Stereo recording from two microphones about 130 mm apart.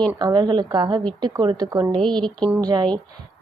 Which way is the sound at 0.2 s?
35° right (ahead or behind).